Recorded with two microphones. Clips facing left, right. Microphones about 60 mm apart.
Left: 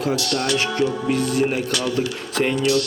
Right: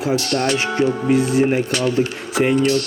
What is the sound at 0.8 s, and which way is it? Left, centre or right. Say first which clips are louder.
Speech: right 4 dB; centre.